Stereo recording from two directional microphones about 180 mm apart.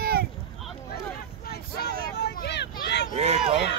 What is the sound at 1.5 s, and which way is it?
Vehicle, 60° left (ahead or behind).